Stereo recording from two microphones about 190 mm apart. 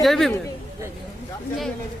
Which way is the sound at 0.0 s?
Centre (ahead or behind).